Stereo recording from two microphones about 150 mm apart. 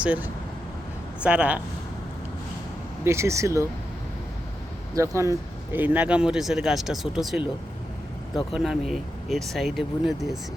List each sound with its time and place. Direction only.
0.0 s speech: 10° right (ahead or behind)
3.0 s speech: 20° right (ahead or behind)
4.9 s speech: 20° right (ahead or behind); by 7.4 s centre (ahead or behind)
8.5 s speech: 5° right (ahead or behind)